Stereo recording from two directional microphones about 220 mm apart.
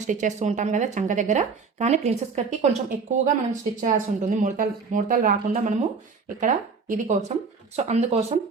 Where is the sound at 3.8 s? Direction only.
35° right (ahead or behind).